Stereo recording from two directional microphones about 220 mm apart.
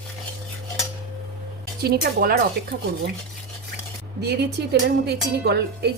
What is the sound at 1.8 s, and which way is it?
Speech, 45° right (ahead or behind).